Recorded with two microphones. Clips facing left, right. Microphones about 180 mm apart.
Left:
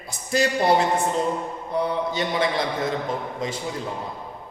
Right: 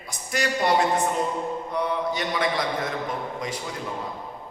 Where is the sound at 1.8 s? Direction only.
30° left (ahead or behind).